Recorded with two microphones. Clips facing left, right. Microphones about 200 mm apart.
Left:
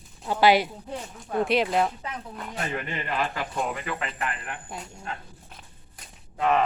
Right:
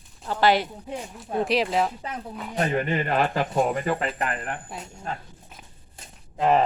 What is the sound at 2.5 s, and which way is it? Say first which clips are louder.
Speech: right 8 dB; 45° right (ahead or behind).